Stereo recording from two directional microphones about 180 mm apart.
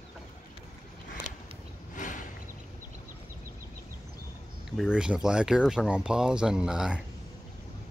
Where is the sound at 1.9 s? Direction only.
45° left (ahead or behind).